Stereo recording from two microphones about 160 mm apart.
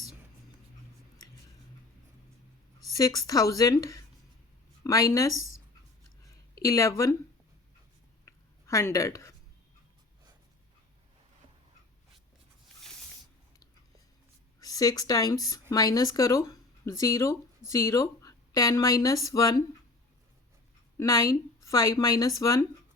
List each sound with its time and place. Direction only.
2.9 s speech: 20° left (ahead or behind)
6.6 s speech: 20° left (ahead or behind)
8.2 s a sound: 20° left (ahead or behind)
14.6 s speech: 20° left (ahead or behind)
21.0 s speech: 20° left (ahead or behind)